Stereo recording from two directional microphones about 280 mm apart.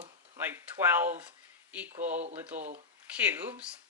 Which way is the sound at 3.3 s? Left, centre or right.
Centre.